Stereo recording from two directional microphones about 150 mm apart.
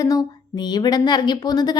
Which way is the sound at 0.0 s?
25° left (ahead or behind).